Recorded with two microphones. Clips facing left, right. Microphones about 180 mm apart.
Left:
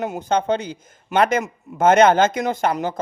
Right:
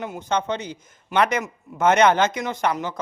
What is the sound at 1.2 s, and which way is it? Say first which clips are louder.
Speech: left 3 dB; 50° left (ahead or behind).